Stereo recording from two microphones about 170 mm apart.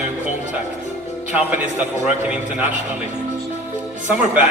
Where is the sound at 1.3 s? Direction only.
10° right (ahead or behind).